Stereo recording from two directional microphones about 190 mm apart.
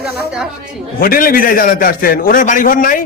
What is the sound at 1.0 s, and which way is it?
A man's voice, 50° left (ahead or behind).